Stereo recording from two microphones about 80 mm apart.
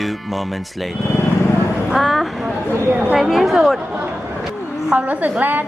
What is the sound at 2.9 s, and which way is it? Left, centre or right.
Speech, right.